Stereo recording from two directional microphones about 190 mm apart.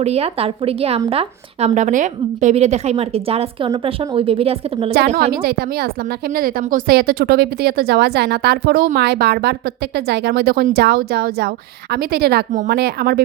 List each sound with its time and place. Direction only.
0.0 s a woman's voice: 35° right (ahead or behind)
5.1 s speech: 50° right (ahead or behind)